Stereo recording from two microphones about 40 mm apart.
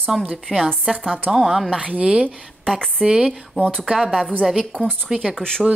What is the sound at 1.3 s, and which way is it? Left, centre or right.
A woman's voice, centre.